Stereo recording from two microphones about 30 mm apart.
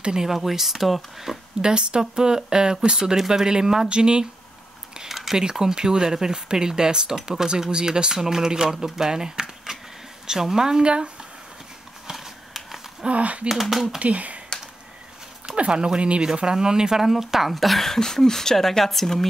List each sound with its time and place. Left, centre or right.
0.3 s speech: centre
1.6 s speech: right
5.0 s a sound: centre
5.4 s speech: right
9.7 s a sound: right
10.2 s speech: right
13.1 s speech: right
13.5 s speech: centre
13.9 s speech: right
15.5 s speech: right
16.3 s speech: right
16.9 s speech: centre
17.5 s speech: centre
17.8 s speech: centre